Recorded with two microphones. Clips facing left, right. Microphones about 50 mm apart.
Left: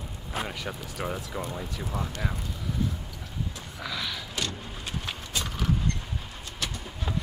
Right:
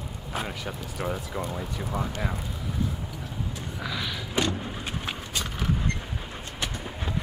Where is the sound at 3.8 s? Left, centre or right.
Centre.